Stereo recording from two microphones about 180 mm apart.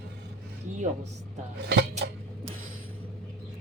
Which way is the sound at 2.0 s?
70° right (ahead or behind).